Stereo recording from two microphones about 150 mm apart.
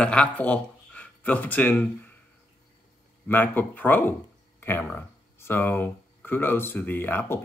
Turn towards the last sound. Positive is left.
turn(degrees=15)  # may be behind; listen again after turning